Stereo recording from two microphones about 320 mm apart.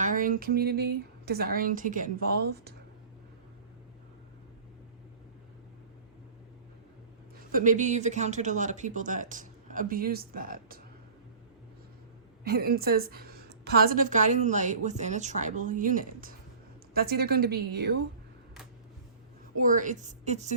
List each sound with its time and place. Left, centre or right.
0.0 s a woman's voice: right
7.5 s a woman's voice: right
12.5 s a woman's voice: right
19.5 s a woman's voice: right